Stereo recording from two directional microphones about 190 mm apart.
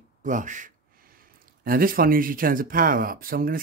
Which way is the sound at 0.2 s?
40° right (ahead or behind).